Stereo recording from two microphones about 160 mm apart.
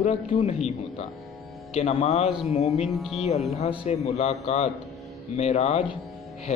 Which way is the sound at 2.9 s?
Centre (ahead or behind).